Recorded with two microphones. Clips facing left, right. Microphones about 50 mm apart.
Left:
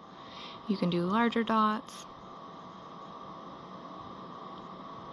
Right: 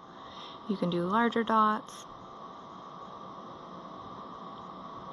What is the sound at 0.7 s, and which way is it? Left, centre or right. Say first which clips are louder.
Speech: even; left.